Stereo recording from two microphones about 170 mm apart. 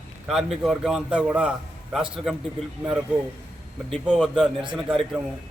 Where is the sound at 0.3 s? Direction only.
Centre (ahead or behind).